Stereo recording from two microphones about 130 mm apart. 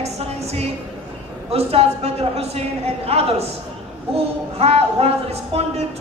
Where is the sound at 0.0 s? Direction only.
55° right (ahead or behind).